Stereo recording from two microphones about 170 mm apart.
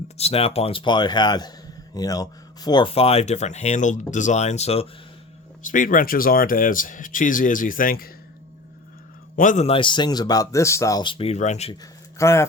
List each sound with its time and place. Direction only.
0.2 s speech: 35° left (ahead or behind)
5.6 s speech: 50° left (ahead or behind)
9.3 s speech: 50° left (ahead or behind)
9.6 s speech: 30° left (ahead or behind)
11.7 s speech: 20° left (ahead or behind)